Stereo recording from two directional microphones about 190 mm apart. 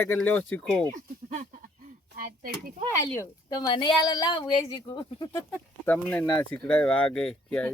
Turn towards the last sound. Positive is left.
turn(degrees=5)  # may be behind; listen again after turning